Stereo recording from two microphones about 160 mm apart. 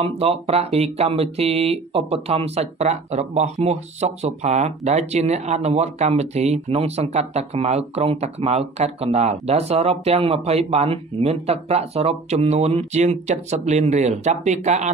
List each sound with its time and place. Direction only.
0.0 s speech: 40° right (ahead or behind)